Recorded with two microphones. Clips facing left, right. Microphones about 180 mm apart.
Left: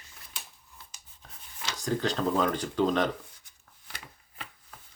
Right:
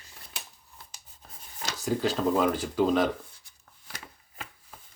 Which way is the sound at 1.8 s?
5° right (ahead or behind).